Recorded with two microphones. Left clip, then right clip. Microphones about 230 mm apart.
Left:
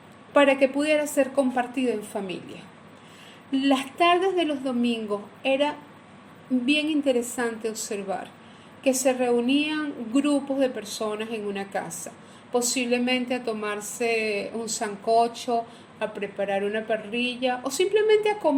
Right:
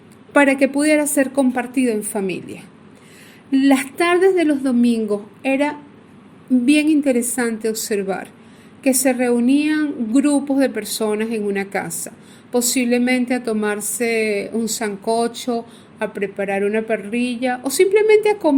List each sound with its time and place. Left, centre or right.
0.3 s a woman's voice: right